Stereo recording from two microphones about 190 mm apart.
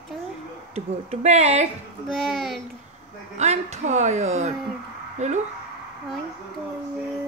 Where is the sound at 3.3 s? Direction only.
35° right (ahead or behind).